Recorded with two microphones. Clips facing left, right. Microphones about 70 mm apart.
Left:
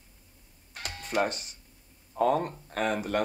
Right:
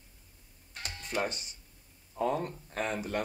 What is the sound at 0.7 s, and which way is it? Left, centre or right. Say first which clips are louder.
Doorbell: left 5 dB; left.